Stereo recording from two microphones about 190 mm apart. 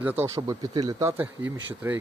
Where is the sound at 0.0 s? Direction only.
10° right (ahead or behind).